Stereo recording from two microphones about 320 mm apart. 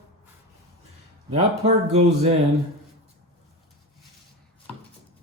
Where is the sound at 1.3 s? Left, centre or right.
Centre.